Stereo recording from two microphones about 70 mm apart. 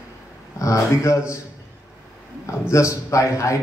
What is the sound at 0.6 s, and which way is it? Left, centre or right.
Speech, left.